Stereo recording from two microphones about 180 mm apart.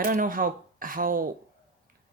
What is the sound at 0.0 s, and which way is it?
Speech, 50° right (ahead or behind).